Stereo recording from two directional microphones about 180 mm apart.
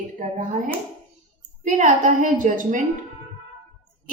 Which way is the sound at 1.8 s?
45° right (ahead or behind).